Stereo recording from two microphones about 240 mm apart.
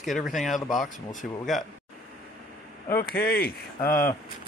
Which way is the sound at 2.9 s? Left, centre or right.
Left.